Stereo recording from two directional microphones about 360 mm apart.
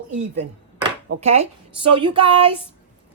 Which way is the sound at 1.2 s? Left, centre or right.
Centre.